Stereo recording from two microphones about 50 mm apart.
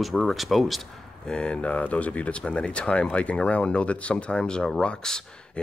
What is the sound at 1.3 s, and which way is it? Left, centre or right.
Speech, centre.